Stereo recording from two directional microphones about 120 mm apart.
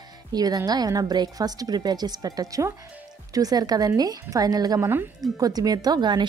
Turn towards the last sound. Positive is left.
turn(degrees=-40)  # may be behind; listen again after turning